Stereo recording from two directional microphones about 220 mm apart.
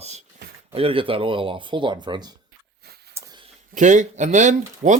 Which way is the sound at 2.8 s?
45° right (ahead or behind).